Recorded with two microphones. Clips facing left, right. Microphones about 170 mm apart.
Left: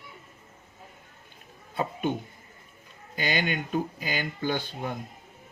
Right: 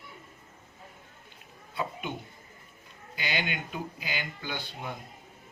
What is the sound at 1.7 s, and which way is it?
Speech, 45° left (ahead or behind).